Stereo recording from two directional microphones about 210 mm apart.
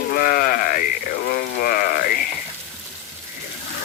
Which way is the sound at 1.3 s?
45° left (ahead or behind).